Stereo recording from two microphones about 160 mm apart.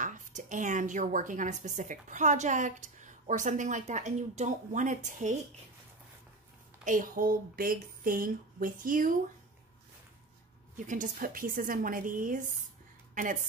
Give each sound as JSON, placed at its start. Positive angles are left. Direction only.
{"t": 0.0, "sound": "a woman's voice", "side_deg": -55}
{"t": 6.8, "sound": "speech", "side_deg": -55}
{"t": 10.9, "sound": "a woman's voice", "side_deg": -55}